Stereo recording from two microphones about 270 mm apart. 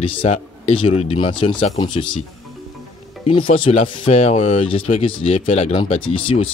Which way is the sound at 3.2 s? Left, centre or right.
Centre.